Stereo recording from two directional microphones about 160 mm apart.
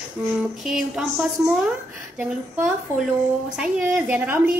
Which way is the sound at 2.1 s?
10° right (ahead or behind).